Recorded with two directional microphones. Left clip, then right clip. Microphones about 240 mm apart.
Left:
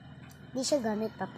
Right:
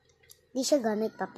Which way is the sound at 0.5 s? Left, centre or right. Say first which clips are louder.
Right 3 dB; centre.